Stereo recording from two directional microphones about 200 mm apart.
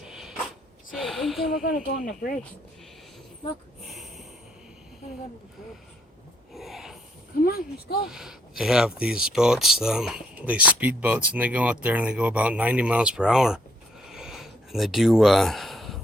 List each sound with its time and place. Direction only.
0.0 s a sound: centre (ahead or behind)
1.6 s speech: 45° left (ahead or behind)
6.5 s snort: centre (ahead or behind)
7.4 s speech: 50° left (ahead or behind)
8.0 s speech: centre (ahead or behind)
14.0 s a sound: centre (ahead or behind)